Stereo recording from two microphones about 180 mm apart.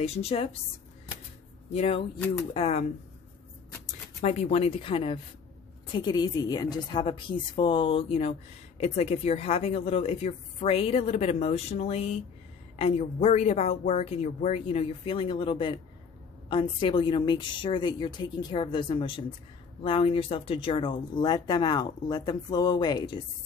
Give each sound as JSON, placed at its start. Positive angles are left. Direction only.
{"t": 0.0, "sound": "a woman's voice", "side_deg": 35}
{"t": 1.7, "sound": "a woman's voice", "side_deg": 35}
{"t": 4.2, "sound": "a woman's voice", "side_deg": 40}